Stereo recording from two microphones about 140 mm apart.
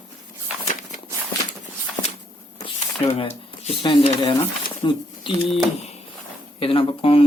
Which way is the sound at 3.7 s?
40° left (ahead or behind).